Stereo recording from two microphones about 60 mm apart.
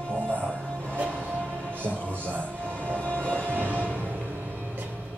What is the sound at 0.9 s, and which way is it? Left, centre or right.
Music, right.